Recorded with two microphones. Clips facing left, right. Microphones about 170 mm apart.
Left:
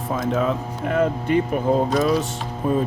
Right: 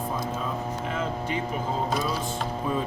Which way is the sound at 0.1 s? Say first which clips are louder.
Left 8 dB; 80° left.